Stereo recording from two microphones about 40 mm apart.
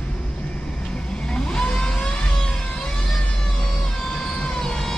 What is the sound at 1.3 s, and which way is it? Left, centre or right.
Vehicle, centre.